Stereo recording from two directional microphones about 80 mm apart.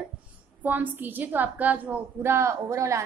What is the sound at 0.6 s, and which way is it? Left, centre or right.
A woman's voice, right.